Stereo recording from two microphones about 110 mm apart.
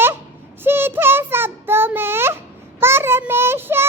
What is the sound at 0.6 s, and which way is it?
Child singing, 20° right (ahead or behind).